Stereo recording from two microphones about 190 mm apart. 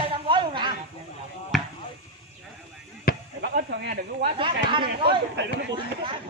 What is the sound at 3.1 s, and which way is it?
Chop, 50° left (ahead or behind).